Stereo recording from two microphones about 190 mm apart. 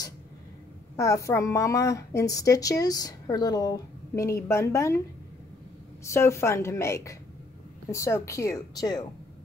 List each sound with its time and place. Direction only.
0.9 s a woman's voice: 15° left (ahead or behind)
6.0 s a woman's voice: 15° left (ahead or behind)